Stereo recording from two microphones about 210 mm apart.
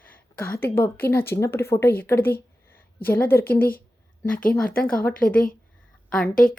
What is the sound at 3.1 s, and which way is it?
Speech, 10° left (ahead or behind).